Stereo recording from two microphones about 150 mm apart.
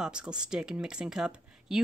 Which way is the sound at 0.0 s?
5° right (ahead or behind).